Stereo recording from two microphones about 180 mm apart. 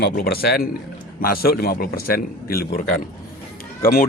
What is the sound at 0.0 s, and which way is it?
A man's voice, 60° left (ahead or behind).